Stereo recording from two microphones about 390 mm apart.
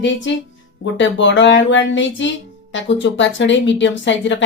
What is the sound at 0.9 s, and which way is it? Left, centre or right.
A woman's voice, left.